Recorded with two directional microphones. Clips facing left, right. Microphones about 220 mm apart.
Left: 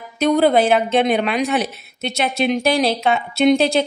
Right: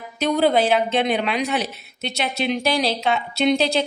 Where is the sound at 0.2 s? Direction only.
50° left (ahead or behind).